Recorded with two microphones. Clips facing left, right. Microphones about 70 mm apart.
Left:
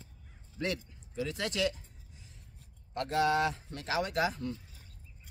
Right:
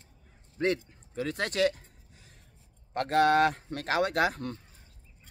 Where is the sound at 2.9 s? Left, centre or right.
Right.